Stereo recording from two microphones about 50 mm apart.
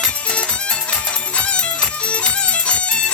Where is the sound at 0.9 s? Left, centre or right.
Left.